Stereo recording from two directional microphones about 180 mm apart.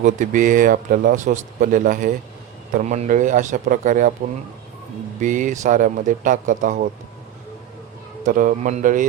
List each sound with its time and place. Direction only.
0.0 s a man's voice: 45° right (ahead or behind)
5.2 s a man's voice: 45° right (ahead or behind)
8.3 s a man's voice: 45° right (ahead or behind)